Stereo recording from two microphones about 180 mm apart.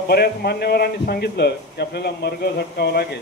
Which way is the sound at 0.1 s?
60° left (ahead or behind).